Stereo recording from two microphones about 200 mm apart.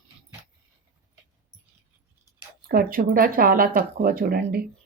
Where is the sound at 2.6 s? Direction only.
45° right (ahead or behind).